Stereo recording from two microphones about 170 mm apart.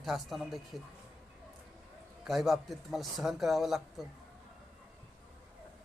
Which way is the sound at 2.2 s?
Centre (ahead or behind).